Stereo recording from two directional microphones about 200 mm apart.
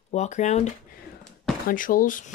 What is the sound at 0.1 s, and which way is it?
Speech, 35° left (ahead or behind).